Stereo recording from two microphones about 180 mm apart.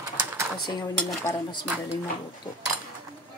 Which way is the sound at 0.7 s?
25° left (ahead or behind).